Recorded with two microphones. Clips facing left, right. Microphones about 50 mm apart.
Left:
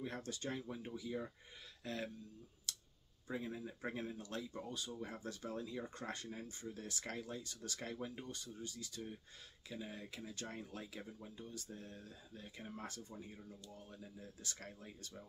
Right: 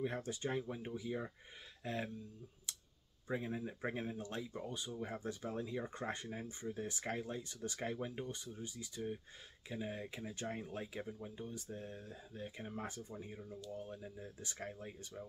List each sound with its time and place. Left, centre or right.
0.0 s speech: centre
2.7 s clicking: centre
3.3 s speech: right